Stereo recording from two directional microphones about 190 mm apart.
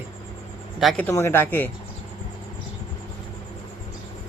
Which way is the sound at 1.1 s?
15° left (ahead or behind).